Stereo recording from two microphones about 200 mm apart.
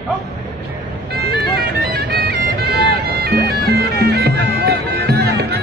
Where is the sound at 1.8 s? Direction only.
55° right (ahead or behind).